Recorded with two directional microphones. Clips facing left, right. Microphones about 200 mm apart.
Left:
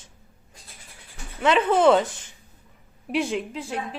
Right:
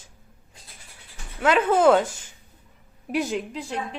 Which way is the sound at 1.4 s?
5° right (ahead or behind).